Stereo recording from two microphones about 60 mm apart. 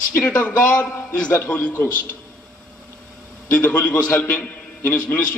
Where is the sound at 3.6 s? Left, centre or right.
Left.